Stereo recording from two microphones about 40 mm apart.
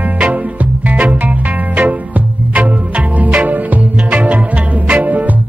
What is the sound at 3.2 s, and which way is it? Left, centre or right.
Music, right.